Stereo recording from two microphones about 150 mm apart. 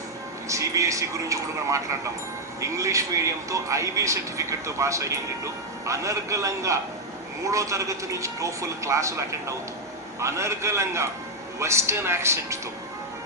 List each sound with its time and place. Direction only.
0.4 s a man's voice: 20° right (ahead or behind)